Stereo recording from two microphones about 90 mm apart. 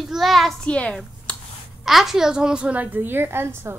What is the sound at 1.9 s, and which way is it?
A woman's voice, 5° right (ahead or behind).